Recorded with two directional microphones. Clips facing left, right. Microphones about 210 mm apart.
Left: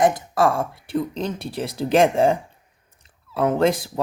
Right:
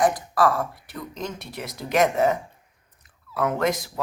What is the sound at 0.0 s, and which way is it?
Speech, 25° left (ahead or behind).